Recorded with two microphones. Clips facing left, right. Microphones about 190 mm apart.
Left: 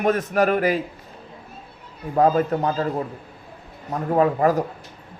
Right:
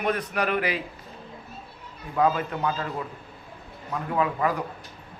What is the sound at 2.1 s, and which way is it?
A man's voice, 40° left (ahead or behind).